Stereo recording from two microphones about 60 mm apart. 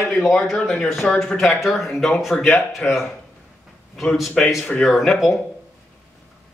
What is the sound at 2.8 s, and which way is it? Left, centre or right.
Speech, left.